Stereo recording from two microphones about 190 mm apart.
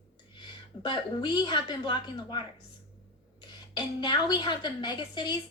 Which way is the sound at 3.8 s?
25° left (ahead or behind).